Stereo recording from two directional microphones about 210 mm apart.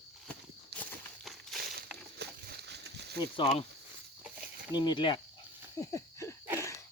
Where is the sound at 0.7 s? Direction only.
50° right (ahead or behind).